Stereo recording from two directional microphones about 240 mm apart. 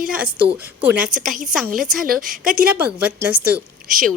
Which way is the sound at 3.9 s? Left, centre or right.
Right.